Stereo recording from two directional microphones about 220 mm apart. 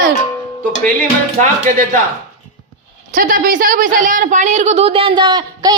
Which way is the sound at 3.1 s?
40° right (ahead or behind).